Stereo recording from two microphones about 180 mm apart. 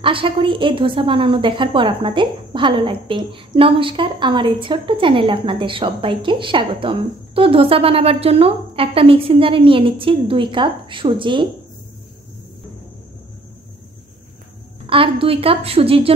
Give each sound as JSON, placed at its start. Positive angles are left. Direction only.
{"t": 0.0, "sound": "a woman's voice", "side_deg": -30}
{"t": 14.9, "sound": "a woman's voice", "side_deg": -30}